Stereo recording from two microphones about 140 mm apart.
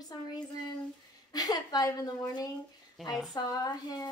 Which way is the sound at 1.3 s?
25° left (ahead or behind).